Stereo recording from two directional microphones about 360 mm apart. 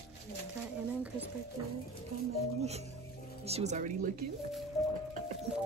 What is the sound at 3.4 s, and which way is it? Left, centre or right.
Speech, centre.